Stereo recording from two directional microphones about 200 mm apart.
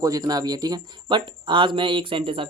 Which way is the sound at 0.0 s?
20° right (ahead or behind).